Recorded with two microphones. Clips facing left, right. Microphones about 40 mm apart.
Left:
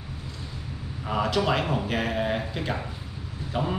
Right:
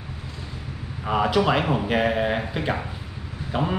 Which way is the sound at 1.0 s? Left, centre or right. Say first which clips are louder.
Right 4 dB; centre.